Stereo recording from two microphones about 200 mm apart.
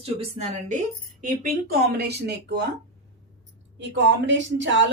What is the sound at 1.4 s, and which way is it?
Speech, 50° right (ahead or behind).